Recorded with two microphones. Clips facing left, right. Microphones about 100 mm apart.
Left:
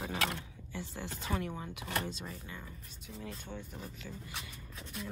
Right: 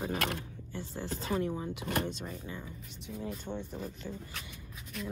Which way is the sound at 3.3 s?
20° right (ahead or behind).